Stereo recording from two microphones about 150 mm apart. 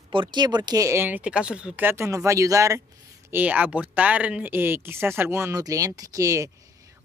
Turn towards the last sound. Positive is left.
turn(degrees=-20)  # may be behind; listen again after turning